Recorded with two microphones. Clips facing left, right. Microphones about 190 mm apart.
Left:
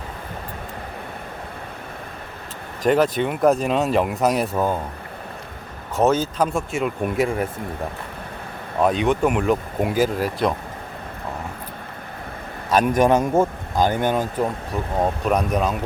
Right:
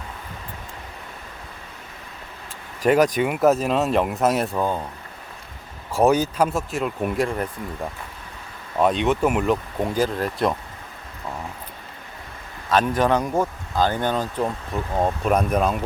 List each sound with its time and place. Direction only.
2.8 s speech: 10° right (ahead or behind)
6.0 s speech: 15° right (ahead or behind)
6.5 s speech: centre (ahead or behind)
8.8 s speech: centre (ahead or behind)
12.7 s a man's voice: 15° left (ahead or behind)
14.7 s speech: centre (ahead or behind)